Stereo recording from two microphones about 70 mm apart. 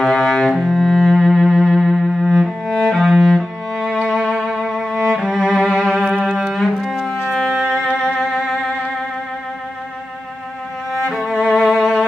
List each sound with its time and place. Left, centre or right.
0.0 s cello: centre
4.9 s music: centre
5.6 s music: centre
6.5 s cello: centre
7.1 s music: left
7.9 s music: centre
10.9 s music: centre